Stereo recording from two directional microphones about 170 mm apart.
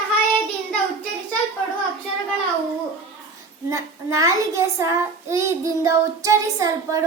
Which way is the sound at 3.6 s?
20° right (ahead or behind).